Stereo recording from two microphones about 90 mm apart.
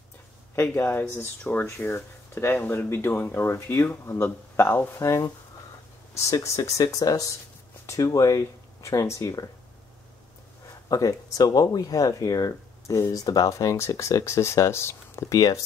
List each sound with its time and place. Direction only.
0.6 s speech: 20° left (ahead or behind); by 9.5 s 40° left (ahead or behind)
10.9 s speech: 40° left (ahead or behind)
15.3 s speech: 40° left (ahead or behind)